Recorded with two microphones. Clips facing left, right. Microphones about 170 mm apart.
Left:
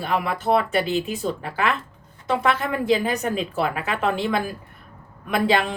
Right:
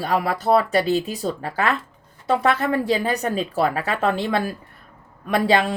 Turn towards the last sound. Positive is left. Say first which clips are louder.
# right 2 dB
turn(degrees=-35)  # may be behind; listen again after turning